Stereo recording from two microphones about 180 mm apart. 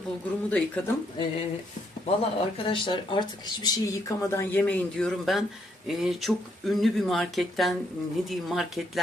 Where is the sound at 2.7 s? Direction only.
25° left (ahead or behind).